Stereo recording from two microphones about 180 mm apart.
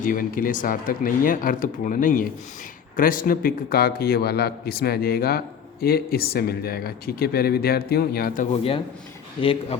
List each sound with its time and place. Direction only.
0.0 s speech: 50° left (ahead or behind)
9.4 s speech: 30° left (ahead or behind)